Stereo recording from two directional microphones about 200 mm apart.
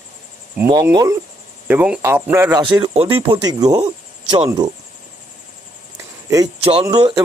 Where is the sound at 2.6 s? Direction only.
25° right (ahead or behind).